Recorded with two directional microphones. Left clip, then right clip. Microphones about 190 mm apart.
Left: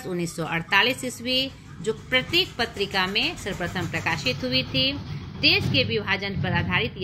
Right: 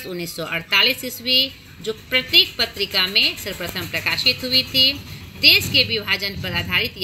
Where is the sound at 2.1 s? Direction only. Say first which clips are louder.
Right 7 dB; 5° right (ahead or behind).